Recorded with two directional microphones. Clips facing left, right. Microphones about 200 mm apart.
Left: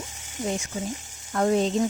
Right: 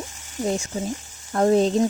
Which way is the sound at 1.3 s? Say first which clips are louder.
Right 4 dB; 35° right (ahead or behind).